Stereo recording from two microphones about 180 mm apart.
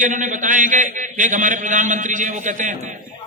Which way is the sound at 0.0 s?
45° right (ahead or behind).